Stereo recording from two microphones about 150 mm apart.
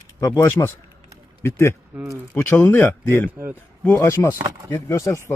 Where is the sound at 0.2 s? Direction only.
15° left (ahead or behind).